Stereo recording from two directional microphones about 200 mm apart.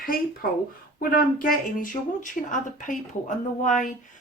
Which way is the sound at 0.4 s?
45° left (ahead or behind).